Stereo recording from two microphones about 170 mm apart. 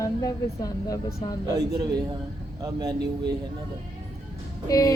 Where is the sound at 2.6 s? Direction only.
25° right (ahead or behind).